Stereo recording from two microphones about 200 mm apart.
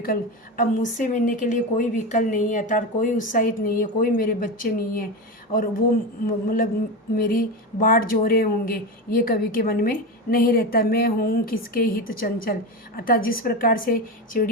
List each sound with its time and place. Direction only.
0.0 s a woman's voice: 45° left (ahead or behind)
6.2 s speech: 45° left (ahead or behind)